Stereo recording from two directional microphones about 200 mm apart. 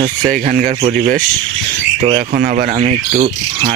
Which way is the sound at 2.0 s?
30° right (ahead or behind).